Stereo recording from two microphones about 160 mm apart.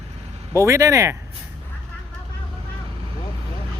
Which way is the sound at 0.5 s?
20° right (ahead or behind).